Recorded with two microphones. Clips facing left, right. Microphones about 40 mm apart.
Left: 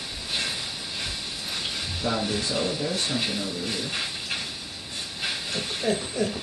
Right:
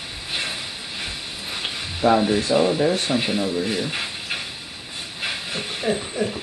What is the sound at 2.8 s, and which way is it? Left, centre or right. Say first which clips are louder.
Speech: right 8 dB; right.